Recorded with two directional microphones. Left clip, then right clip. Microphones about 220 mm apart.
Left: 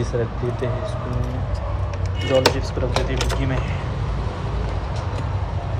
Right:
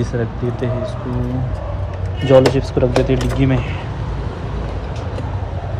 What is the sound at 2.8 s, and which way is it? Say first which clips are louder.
Speech: right 8 dB; 20° right (ahead or behind).